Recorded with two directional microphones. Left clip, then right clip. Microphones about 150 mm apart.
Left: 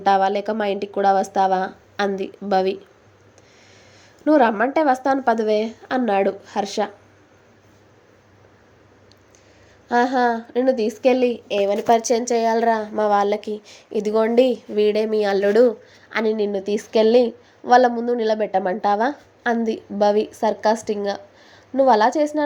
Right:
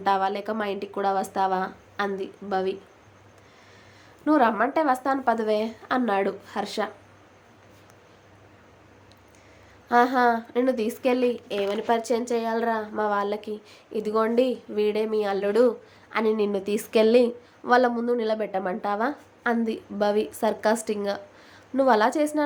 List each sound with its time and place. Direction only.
0.0 s speech: 25° left (ahead or behind)
4.3 s speech: 25° left (ahead or behind)
9.9 s a woman's voice: 10° left (ahead or behind)
11.0 s a woman's voice: 20° left (ahead or behind); by 22.4 s 5° left (ahead or behind)